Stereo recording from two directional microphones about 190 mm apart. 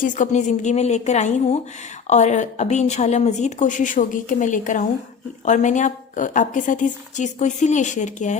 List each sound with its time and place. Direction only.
0.0 s a woman's voice: 40° left (ahead or behind)